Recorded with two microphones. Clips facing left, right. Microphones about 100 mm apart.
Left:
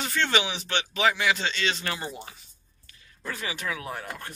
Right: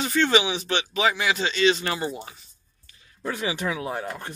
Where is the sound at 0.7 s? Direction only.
15° right (ahead or behind).